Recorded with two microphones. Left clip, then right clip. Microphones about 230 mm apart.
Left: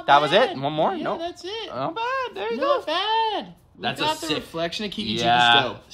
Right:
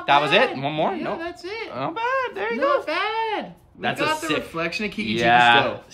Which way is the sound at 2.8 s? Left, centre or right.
Right.